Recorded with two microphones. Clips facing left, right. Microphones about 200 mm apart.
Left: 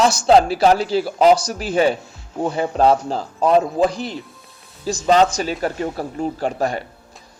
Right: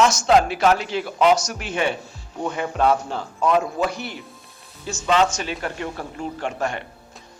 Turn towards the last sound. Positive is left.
turn(degrees=35)  # may be behind; listen again after turning